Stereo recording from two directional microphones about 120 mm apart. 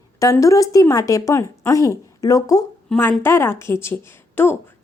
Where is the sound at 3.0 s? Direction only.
20° left (ahead or behind).